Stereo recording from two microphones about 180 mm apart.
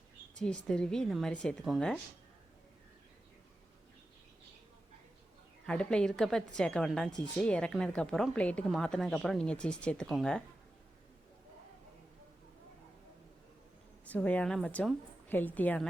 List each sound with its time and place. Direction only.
0.3 s a woman's voice: 5° left (ahead or behind)
5.6 s a woman's voice: 5° left (ahead or behind)
14.1 s a woman's voice: 10° left (ahead or behind)